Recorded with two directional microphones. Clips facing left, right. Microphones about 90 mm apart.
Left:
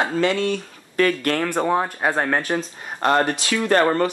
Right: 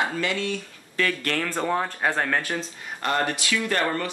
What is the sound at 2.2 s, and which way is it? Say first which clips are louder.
Speech: left 4 dB; 35° left (ahead or behind).